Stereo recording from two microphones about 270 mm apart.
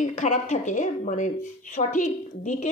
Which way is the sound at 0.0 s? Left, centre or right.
Left.